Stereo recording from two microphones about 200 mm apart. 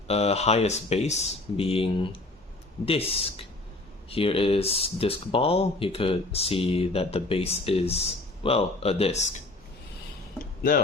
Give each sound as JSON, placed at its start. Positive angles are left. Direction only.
{"t": 0.1, "sound": "speech", "side_deg": 30}